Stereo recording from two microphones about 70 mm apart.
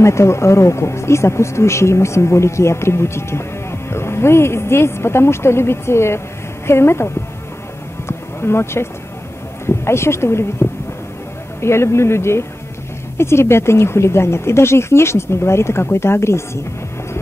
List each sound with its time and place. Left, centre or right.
0.0 s speech: left
8.1 s a sound: left
9.8 s speech: left